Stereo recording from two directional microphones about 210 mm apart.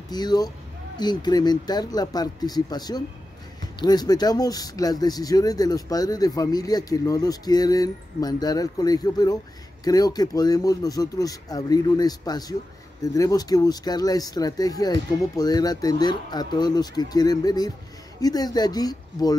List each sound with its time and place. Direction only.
0.1 s speech: 20° left (ahead or behind)